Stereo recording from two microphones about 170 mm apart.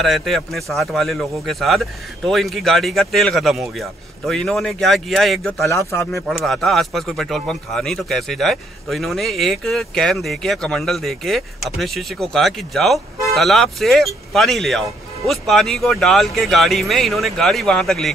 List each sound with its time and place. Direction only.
0.0 s speech: centre (ahead or behind)
5.6 s speech: 15° left (ahead or behind)
6.2 s speech: centre (ahead or behind)